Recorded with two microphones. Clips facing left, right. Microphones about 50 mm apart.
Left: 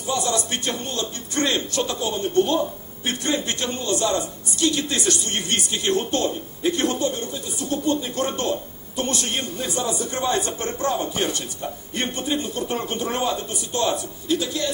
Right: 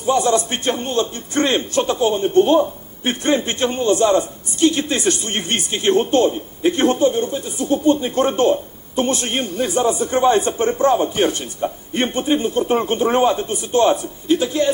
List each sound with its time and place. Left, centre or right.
0.0 s a man's voice: right